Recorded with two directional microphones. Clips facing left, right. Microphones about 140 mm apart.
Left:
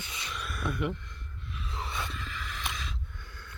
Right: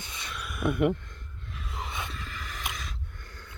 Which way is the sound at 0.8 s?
50° right (ahead or behind).